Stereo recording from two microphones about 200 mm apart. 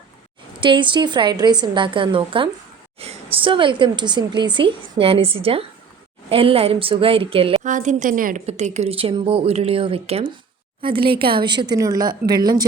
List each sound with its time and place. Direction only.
0.6 s a woman's voice: 25° right (ahead or behind)
3.0 s a sound: 30° right (ahead or behind)
3.4 s a woman's voice: 25° right (ahead or behind)